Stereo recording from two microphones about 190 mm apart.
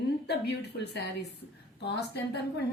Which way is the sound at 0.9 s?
60° left (ahead or behind).